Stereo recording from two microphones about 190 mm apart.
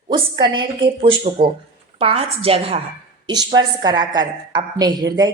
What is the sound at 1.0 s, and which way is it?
A woman's voice, 30° right (ahead or behind).